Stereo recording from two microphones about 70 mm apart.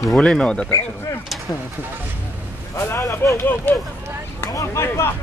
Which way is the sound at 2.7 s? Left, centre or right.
Left.